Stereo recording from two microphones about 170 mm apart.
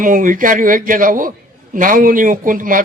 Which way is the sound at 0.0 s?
55° right (ahead or behind).